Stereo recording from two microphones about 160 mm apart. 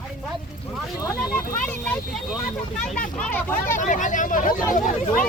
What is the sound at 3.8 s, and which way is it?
Speech, 50° left (ahead or behind).